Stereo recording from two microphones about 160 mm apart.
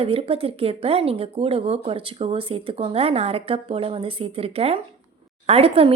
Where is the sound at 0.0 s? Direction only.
35° right (ahead or behind).